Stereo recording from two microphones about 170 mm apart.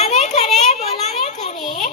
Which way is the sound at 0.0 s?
40° left (ahead or behind).